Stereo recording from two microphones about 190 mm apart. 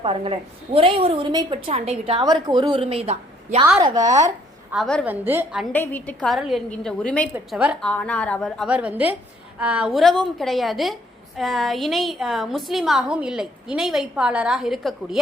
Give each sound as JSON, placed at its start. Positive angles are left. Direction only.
{"t": 0.0, "sound": "a woman's voice", "side_deg": -30}
{"t": 3.8, "sound": "a woman's voice", "side_deg": -20}
{"t": 4.7, "sound": "a woman's voice", "side_deg": 0}
{"t": 5.0, "sound": "a woman's voice", "side_deg": -10}
{"t": 5.7, "sound": "a woman's voice", "side_deg": 10}
{"t": 7.3, "sound": "a woman's voice", "side_deg": -5}
{"t": 8.6, "sound": "a woman's voice", "side_deg": -5}